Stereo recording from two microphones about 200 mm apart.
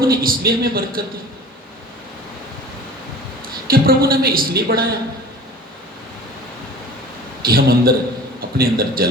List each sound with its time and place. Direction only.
0.0 s a woman's voice: 45° right (ahead or behind)
3.7 s a woman's voice: 50° right (ahead or behind)
7.4 s a woman's voice: 50° right (ahead or behind)